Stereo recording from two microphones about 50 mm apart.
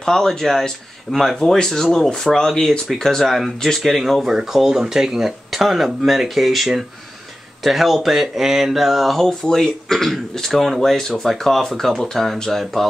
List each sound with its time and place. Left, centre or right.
0.0 s speech: centre